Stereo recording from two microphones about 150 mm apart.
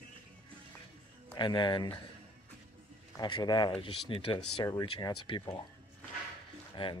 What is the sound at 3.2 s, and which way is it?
Speech, 30° left (ahead or behind).